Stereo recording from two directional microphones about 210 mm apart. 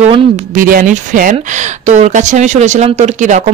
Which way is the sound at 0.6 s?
40° right (ahead or behind).